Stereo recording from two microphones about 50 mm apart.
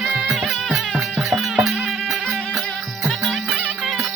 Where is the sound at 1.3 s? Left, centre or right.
Centre.